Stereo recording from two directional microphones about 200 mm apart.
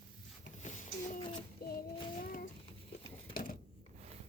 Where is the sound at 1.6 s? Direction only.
50° left (ahead or behind).